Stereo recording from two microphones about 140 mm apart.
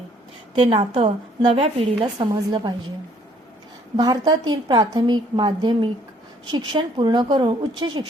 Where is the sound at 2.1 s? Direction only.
30° right (ahead or behind).